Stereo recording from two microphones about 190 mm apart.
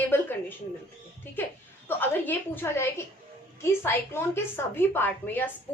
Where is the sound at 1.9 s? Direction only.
10° left (ahead or behind).